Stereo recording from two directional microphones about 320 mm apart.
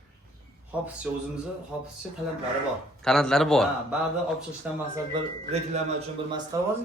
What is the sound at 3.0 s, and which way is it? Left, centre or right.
A man's voice, centre.